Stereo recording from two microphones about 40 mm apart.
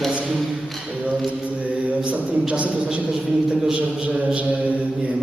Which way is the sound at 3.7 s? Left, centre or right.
Centre.